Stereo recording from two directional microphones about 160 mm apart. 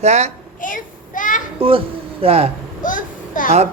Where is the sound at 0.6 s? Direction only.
55° left (ahead or behind).